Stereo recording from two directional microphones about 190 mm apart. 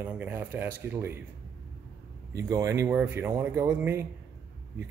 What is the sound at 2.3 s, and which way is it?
Speech, 15° right (ahead or behind).